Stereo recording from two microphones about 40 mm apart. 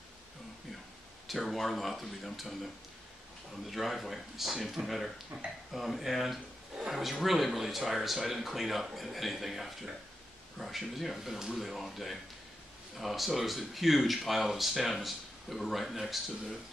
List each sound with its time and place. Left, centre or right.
1.2 s speech: centre
5.3 s speech: right
5.7 s speech: centre